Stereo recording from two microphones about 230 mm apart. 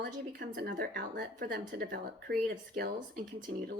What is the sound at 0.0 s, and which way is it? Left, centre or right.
A woman's voice, right.